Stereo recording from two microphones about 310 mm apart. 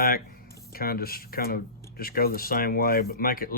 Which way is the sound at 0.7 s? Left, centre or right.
Left.